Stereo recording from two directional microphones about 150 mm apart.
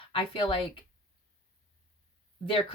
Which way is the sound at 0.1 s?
35° left (ahead or behind).